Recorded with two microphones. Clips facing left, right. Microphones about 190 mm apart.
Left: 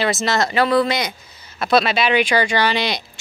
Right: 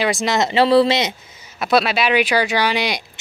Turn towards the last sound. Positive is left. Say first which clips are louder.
# even
turn(degrees=-10)  # may be behind; listen again after turning